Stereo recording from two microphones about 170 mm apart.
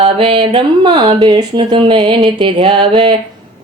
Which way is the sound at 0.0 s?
30° right (ahead or behind).